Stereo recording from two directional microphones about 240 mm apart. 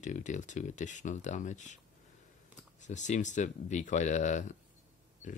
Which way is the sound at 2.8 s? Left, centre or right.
Left.